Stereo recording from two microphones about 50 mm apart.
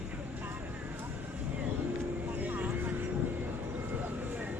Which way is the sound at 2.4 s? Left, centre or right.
Right.